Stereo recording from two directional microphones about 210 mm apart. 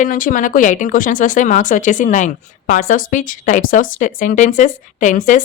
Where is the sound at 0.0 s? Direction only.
40° left (ahead or behind).